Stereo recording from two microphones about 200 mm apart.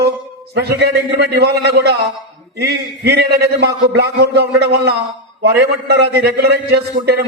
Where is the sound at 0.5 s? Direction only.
55° right (ahead or behind).